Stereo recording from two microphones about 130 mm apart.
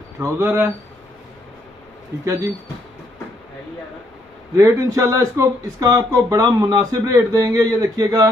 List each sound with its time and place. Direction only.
0.2 s speech: 20° right (ahead or behind)
4.6 s speech: 25° right (ahead or behind)